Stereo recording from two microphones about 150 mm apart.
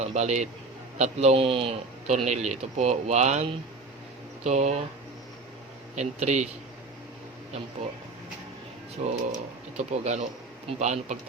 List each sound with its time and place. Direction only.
0.0 s speech: 50° right (ahead or behind)
6.0 s speech: 50° right (ahead or behind)
9.0 s speech: 50° right (ahead or behind)